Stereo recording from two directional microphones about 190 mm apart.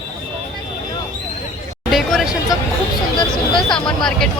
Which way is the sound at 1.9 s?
Centre (ahead or behind).